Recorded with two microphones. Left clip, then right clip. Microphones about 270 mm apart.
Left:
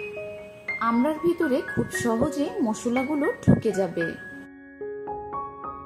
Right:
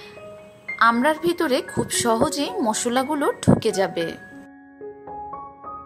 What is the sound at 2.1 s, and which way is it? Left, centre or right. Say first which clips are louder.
Speech: right 5 dB; right.